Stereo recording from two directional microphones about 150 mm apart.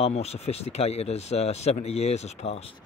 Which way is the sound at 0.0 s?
45° left (ahead or behind).